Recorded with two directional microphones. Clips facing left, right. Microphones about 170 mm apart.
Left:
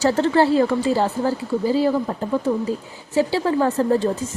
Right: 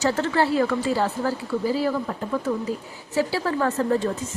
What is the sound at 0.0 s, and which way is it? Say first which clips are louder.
A woman's voice: left 5 dB; 30° left (ahead or behind).